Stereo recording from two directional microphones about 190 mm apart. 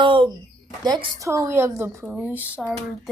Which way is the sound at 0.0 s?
25° right (ahead or behind).